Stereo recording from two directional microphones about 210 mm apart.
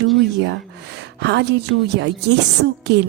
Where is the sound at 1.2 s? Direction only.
55° right (ahead or behind).